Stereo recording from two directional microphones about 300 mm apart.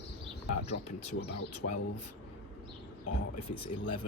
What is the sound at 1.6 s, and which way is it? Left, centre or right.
Speech, left.